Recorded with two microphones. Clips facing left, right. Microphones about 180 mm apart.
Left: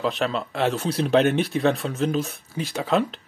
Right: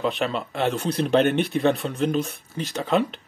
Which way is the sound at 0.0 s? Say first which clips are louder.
Even; centre (ahead or behind).